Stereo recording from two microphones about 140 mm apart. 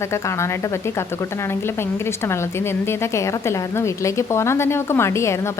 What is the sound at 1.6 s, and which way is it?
A woman's voice, 15° left (ahead or behind).